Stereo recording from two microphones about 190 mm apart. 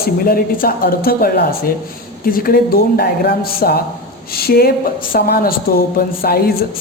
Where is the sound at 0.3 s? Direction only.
50° left (ahead or behind).